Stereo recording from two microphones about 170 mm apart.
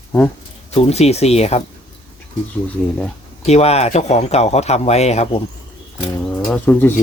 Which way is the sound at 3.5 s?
40° left (ahead or behind).